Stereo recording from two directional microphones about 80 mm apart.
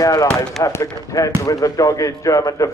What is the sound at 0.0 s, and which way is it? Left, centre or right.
Speech, left.